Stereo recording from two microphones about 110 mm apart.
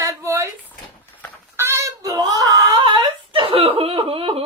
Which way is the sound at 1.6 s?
25° right (ahead or behind).